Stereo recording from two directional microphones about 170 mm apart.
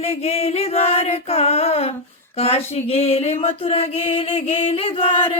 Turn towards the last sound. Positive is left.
turn(degrees=35)  # may be behind; listen again after turning